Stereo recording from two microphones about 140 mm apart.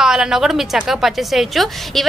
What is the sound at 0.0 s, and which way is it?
A woman's voice, 5° right (ahead or behind).